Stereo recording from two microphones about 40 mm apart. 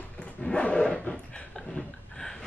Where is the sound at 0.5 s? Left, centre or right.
Left.